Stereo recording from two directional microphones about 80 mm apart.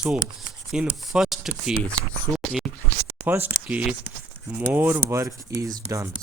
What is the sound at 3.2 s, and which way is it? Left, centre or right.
Speech, right.